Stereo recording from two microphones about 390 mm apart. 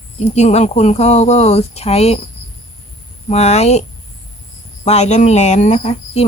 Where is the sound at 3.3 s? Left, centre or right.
Centre.